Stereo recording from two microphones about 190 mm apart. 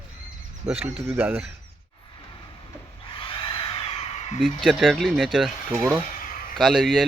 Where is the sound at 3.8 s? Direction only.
35° left (ahead or behind).